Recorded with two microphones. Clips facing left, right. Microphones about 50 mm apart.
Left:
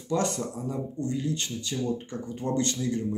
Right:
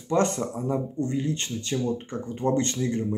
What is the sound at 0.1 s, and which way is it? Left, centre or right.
Speech, right.